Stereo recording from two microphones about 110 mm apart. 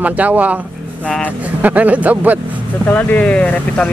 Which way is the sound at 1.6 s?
15° right (ahead or behind).